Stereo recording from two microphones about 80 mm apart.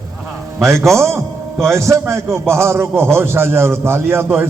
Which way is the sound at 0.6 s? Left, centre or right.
Right.